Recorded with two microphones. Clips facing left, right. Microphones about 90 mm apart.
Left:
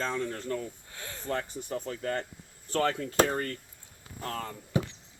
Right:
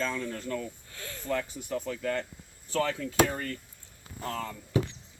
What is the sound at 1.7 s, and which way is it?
Speech, 40° left (ahead or behind).